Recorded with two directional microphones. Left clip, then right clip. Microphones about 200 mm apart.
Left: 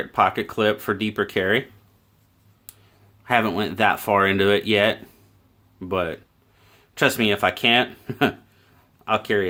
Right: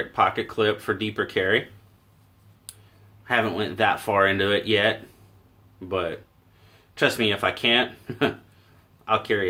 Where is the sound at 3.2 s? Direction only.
55° left (ahead or behind).